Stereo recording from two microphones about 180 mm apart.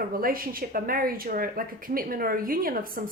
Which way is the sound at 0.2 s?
55° right (ahead or behind).